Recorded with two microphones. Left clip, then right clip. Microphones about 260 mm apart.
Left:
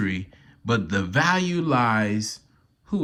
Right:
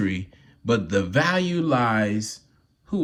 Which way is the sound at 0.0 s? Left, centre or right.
Centre.